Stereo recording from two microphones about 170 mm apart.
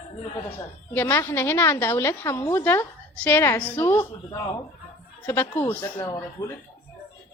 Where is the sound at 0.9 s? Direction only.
15° left (ahead or behind).